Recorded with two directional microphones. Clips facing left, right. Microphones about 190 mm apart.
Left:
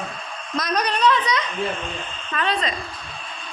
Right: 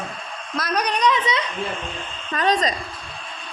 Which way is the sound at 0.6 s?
10° right (ahead or behind).